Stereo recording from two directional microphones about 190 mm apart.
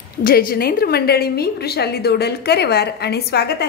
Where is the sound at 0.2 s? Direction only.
50° left (ahead or behind).